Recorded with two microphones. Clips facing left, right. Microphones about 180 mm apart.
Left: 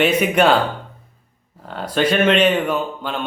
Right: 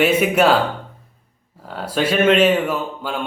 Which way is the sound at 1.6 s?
5° right (ahead or behind).